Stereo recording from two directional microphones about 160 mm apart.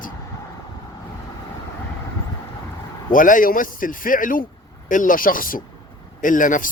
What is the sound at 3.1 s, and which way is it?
A man's voice, 55° left (ahead or behind).